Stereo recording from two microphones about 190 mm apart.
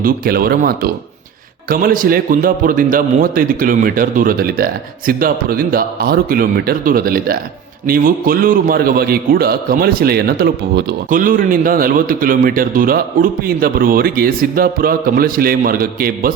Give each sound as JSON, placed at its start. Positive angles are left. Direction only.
{"t": 0.0, "sound": "a man's voice", "side_deg": -50}